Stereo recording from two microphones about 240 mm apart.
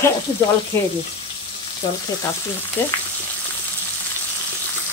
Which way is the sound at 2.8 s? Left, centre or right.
Centre.